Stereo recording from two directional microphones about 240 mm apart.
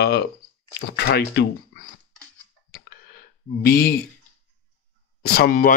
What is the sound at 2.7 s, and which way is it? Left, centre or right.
Clicking, left.